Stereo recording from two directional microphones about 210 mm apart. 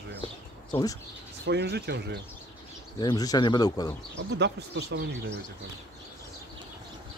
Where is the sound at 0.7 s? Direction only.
20° left (ahead or behind).